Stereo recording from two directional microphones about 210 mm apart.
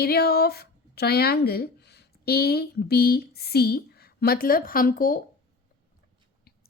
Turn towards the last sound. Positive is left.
turn(degrees=40)  # may be behind; listen again after turning